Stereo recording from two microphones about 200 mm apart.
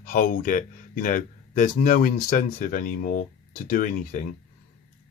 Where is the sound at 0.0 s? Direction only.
45° left (ahead or behind).